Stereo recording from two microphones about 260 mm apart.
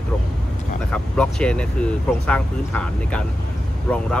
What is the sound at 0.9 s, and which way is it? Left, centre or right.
Speech, centre.